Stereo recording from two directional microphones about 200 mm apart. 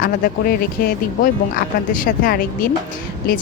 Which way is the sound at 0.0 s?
45° left (ahead or behind).